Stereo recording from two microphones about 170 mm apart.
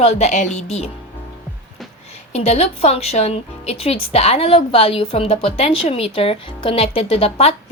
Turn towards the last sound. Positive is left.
turn(degrees=35)  # may be behind; listen again after turning